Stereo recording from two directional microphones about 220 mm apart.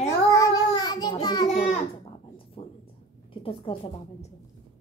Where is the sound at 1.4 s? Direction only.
30° left (ahead or behind).